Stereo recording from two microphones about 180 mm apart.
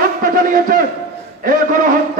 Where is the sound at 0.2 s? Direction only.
50° right (ahead or behind).